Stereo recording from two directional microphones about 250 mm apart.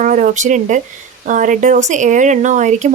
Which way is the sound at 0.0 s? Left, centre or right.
Right.